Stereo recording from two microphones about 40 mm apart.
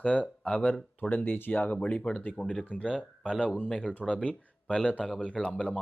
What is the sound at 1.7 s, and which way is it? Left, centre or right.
Speech, left.